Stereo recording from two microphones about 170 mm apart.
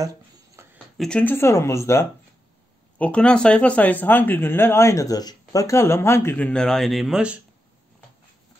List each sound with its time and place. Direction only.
0.6 s a sound: 15° right (ahead or behind)
0.9 s speech: 5° left (ahead or behind)
3.0 s speech: 5° left (ahead or behind)